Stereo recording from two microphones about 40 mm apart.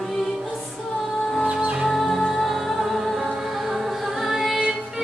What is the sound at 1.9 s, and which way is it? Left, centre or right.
Music, centre.